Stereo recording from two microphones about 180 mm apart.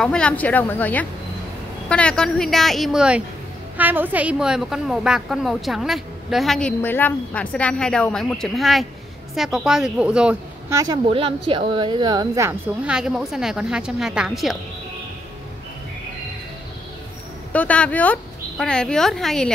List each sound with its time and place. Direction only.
0.0 s a woman's voice: 5° left (ahead or behind)
10.7 s speech: 20° right (ahead or behind)
11.1 s a woman's voice: 30° right (ahead or behind); by 14.6 s centre (ahead or behind)
17.5 s speech: 10° left (ahead or behind)